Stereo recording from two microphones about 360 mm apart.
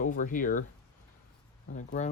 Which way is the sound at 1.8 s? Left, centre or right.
Centre.